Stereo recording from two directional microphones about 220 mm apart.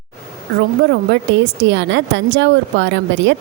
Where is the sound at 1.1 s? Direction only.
55° right (ahead or behind).